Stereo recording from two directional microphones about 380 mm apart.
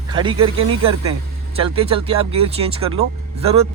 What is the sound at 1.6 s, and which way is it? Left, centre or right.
Speech, centre.